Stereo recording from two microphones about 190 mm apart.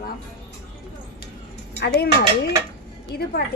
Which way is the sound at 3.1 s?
60° left (ahead or behind).